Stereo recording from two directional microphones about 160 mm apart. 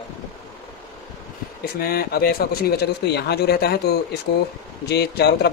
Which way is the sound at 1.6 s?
70° left (ahead or behind).